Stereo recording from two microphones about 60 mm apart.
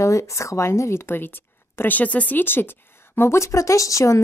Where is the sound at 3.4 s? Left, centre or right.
Left.